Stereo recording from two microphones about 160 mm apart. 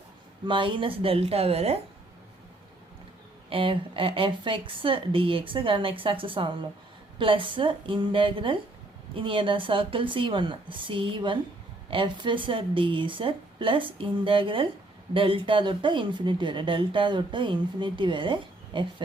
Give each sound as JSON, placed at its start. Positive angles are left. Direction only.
{"t": 0.4, "sound": "speech", "side_deg": -30}
{"t": 3.5, "sound": "speech", "side_deg": -35}